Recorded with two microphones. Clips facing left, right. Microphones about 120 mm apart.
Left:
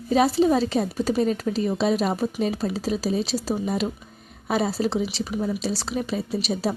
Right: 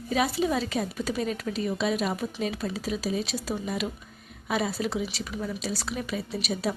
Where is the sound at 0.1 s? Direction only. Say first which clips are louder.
Left 7 dB; 35° left (ahead or behind).